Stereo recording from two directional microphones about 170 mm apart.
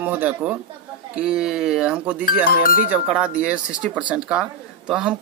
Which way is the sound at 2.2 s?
55° left (ahead or behind).